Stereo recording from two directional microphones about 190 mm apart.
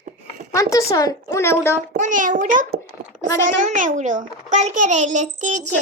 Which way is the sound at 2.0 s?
45° right (ahead or behind).